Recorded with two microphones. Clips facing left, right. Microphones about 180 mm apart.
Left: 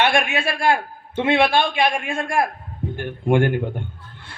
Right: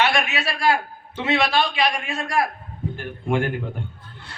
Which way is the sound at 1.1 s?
55° left (ahead or behind).